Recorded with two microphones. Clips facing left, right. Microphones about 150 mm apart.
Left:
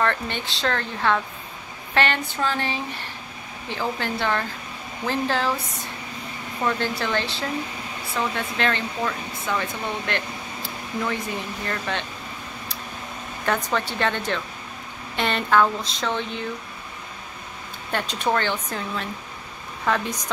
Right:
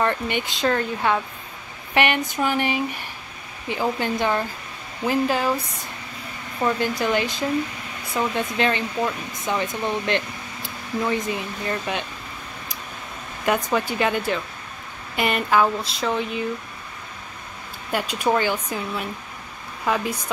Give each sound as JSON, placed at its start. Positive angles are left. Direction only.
{"t": 0.0, "sound": "speech", "side_deg": -15}
{"t": 6.6, "sound": "speech", "side_deg": -15}
{"t": 13.7, "sound": "speech", "side_deg": -10}
{"t": 17.9, "sound": "speech", "side_deg": -10}